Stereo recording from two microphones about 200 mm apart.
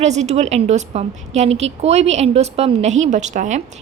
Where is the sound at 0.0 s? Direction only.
35° right (ahead or behind).